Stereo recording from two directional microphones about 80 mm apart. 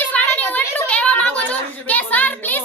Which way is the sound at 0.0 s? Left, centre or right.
Centre.